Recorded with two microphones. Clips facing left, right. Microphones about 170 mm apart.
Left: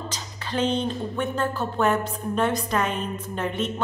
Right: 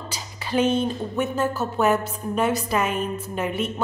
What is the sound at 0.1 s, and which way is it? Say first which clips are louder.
Speech: right 9 dB; 10° right (ahead or behind).